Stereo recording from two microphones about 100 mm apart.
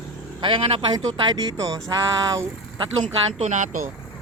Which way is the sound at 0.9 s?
45° right (ahead or behind).